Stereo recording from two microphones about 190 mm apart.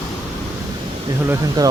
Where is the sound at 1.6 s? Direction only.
20° right (ahead or behind).